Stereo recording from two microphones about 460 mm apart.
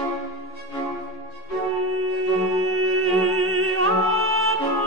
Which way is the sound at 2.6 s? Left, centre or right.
Right.